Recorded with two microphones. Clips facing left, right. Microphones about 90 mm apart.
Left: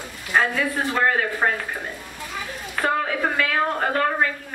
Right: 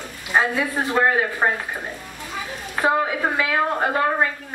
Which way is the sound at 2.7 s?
15° right (ahead or behind).